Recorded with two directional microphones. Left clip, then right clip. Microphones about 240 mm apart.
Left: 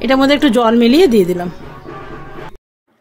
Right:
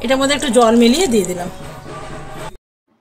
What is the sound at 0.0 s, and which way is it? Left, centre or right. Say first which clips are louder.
A woman's voice: left 4 dB; left.